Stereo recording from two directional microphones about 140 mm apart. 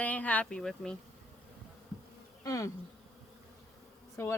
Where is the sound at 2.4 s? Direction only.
25° left (ahead or behind).